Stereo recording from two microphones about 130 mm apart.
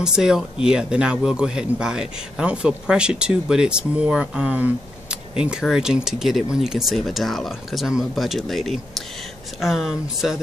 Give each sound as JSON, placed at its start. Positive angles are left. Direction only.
{"t": 0.0, "sound": "speech", "side_deg": -5}